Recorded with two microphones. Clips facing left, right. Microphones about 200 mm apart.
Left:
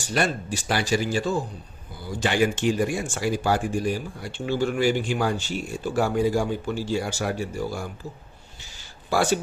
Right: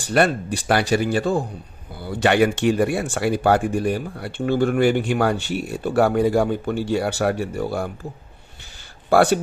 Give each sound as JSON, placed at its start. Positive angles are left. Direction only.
{"t": 0.1, "sound": "speech", "side_deg": -60}
{"t": 9.1, "sound": "speech", "side_deg": -60}